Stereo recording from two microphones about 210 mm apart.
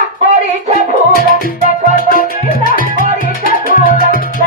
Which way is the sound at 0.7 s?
45° left (ahead or behind).